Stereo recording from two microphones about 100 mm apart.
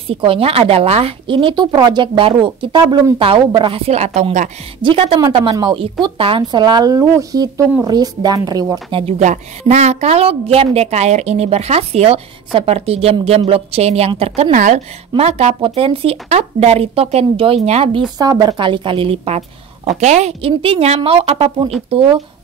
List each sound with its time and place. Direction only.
0.1 s a woman's voice: 65° right (ahead or behind); by 4.3 s 90° right
4.8 s a woman's voice: 65° right (ahead or behind)
6.5 s speech: 45° right (ahead or behind)
7.0 s a woman's voice: 30° right (ahead or behind)
9.7 s speech: 90° right
18.1 s a woman's voice: 40° right (ahead or behind)
18.6 s a woman's voice: 55° right (ahead or behind); by 22.1 s 80° right